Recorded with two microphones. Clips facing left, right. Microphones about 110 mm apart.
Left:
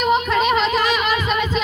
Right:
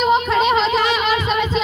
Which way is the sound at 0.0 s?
30° right (ahead or behind).